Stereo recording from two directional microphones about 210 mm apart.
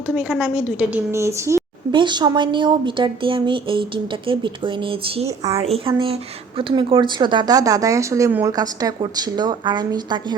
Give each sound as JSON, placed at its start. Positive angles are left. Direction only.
{"t": 0.1, "sound": "a woman's voice", "side_deg": -5}